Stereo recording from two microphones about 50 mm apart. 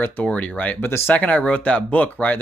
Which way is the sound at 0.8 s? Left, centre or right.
Left.